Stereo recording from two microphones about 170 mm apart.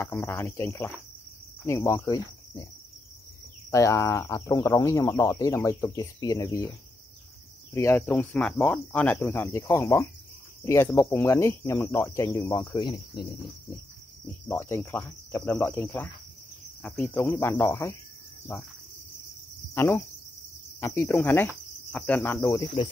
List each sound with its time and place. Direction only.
0.0 s speech: 15° left (ahead or behind)
1.6 s cricket: 15° left (ahead or behind)
3.7 s speech: 15° left (ahead or behind)
7.7 s speech: 15° left (ahead or behind)
14.2 s speech: 10° left (ahead or behind)
19.7 s speech: 15° left (ahead or behind)
21.1 s speech: 10° left (ahead or behind)